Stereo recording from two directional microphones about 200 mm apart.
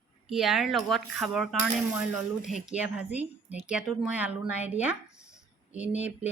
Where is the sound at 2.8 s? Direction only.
5° right (ahead or behind).